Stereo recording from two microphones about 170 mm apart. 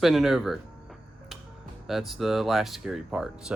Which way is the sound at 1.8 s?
Centre (ahead or behind).